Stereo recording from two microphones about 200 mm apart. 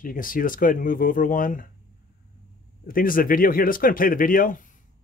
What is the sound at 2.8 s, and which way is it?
Speech, 45° left (ahead or behind).